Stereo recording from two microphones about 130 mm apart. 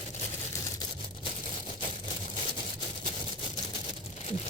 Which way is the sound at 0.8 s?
40° left (ahead or behind).